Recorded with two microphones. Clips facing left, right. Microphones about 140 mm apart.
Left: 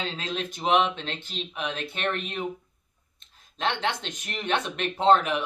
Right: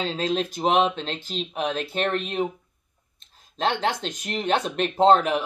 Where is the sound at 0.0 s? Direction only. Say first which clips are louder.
Right 7 dB; 35° right (ahead or behind).